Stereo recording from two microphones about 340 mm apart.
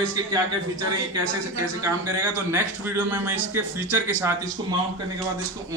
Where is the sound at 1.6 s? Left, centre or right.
Centre.